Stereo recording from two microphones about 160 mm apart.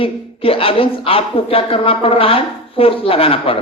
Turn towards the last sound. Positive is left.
turn(degrees=35)  # may be behind; listen again after turning